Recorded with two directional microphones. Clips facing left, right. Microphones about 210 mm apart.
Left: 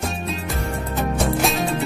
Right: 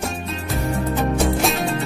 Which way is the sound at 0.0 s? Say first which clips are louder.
Even; centre (ahead or behind).